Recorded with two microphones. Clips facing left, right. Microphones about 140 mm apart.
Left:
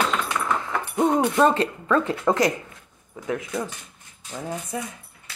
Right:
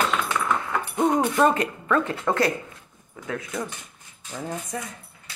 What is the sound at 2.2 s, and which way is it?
Speech, 15° left (ahead or behind).